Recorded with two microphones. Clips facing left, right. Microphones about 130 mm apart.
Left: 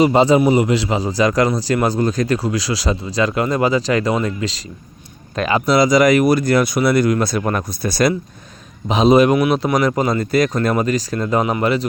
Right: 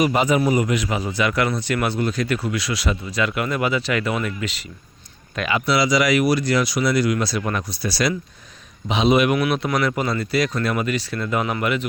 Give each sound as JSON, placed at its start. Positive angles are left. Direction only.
{"t": 0.0, "sound": "speech", "side_deg": 30}
{"t": 9.8, "sound": "speech", "side_deg": 40}